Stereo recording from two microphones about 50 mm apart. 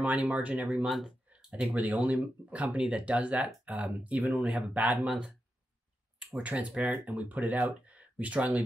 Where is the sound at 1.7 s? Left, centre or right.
Right.